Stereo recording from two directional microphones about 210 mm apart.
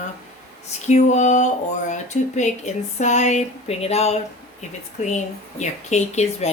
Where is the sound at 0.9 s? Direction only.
35° left (ahead or behind).